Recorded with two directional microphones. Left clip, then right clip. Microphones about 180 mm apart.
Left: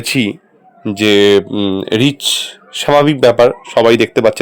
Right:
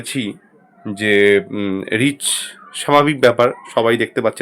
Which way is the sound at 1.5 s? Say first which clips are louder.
Left 5 dB; 20° left (ahead or behind).